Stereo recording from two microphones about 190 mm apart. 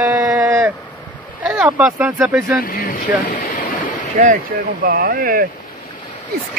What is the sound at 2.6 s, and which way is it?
Speech, 50° left (ahead or behind).